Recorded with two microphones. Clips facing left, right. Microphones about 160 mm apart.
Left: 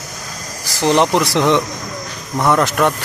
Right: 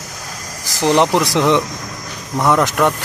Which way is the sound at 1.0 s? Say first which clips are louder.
Right 1 dB; 15° right (ahead or behind).